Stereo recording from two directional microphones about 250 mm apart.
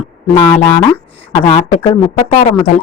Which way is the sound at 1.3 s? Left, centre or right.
Left.